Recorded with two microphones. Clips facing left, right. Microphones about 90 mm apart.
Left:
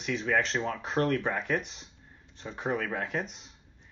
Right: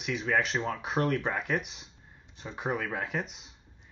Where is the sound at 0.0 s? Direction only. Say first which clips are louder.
Even; 5° right (ahead or behind).